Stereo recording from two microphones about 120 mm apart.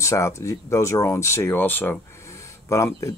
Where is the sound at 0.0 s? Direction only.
25° left (ahead or behind).